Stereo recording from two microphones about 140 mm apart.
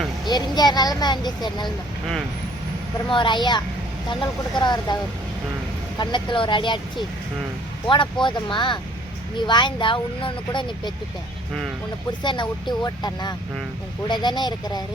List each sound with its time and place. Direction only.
0.3 s speech: 30° left (ahead or behind)
3.1 s speech: 35° left (ahead or behind)
6.0 s speech: 35° left (ahead or behind)
12.2 s speech: 35° left (ahead or behind)